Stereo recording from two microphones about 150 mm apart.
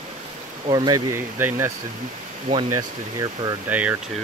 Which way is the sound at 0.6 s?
30° right (ahead or behind).